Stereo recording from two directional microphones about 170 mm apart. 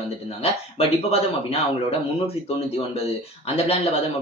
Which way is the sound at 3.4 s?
35° left (ahead or behind).